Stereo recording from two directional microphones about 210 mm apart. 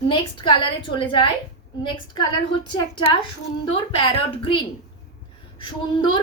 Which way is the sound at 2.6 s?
25° left (ahead or behind).